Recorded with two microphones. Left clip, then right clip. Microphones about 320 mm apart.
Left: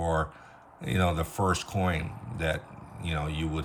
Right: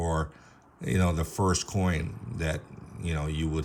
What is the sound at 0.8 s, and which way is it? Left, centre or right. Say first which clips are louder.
Speech: left 2 dB; right.